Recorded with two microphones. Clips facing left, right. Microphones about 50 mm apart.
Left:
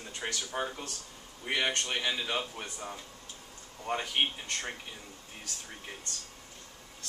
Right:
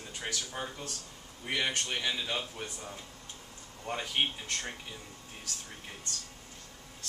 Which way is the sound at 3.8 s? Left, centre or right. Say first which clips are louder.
Left 2 dB; centre.